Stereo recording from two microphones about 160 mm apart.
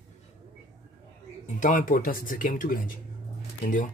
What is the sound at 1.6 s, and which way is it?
Speech, 55° left (ahead or behind).